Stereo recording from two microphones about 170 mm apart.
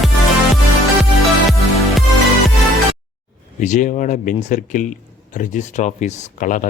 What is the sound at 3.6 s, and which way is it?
Speech, 45° left (ahead or behind).